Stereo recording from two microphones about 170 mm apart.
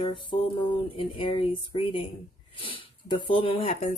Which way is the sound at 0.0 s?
30° left (ahead or behind).